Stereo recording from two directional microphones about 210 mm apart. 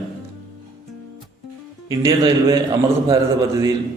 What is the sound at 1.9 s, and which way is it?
Speech, 15° right (ahead or behind).